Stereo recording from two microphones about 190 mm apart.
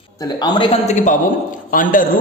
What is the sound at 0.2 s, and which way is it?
A man's voice, 20° left (ahead or behind).